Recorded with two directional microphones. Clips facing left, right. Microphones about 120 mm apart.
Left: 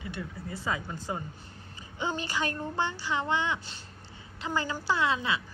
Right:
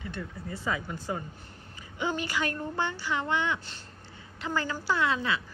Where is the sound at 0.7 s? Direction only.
25° left (ahead or behind).